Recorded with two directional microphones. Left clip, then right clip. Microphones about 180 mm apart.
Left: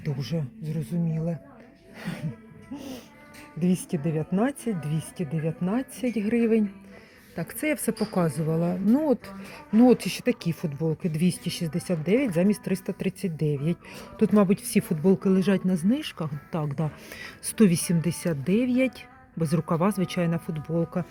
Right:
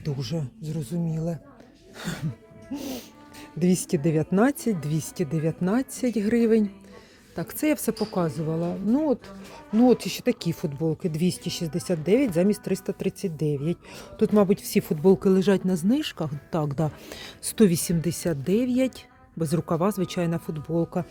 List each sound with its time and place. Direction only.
0.0 s speech: 15° right (ahead or behind)
2.0 s music: 35° right (ahead or behind)
2.7 s speech: 45° right (ahead or behind); by 7.9 s 15° right (ahead or behind)
7.9 s speech: 5° right (ahead or behind)